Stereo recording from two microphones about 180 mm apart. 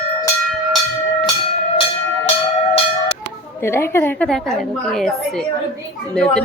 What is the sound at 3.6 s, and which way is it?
A woman's voice, 15° left (ahead or behind).